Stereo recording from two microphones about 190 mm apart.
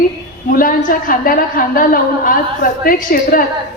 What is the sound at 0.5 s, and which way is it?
A woman's voice, 45° left (ahead or behind).